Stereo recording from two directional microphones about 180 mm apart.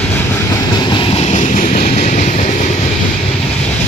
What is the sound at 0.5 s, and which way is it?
Vehicle, 25° left (ahead or behind).